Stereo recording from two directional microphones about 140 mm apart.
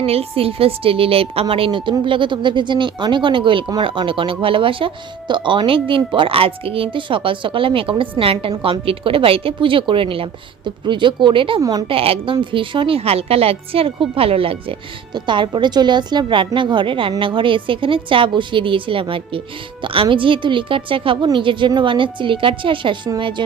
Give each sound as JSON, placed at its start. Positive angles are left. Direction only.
{"t": 0.0, "sound": "a woman's voice", "side_deg": -45}
{"t": 11.6, "sound": "a woman's voice", "side_deg": -25}
{"t": 11.9, "sound": "a woman's voice", "side_deg": -40}